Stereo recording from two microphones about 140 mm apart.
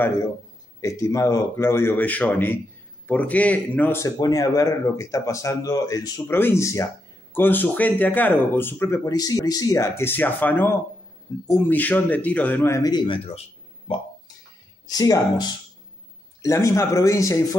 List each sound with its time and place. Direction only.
0.7 s speech: 20° left (ahead or behind)
14.9 s speech: 25° left (ahead or behind)